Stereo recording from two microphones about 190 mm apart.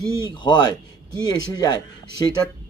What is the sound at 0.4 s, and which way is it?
Speech, 20° left (ahead or behind).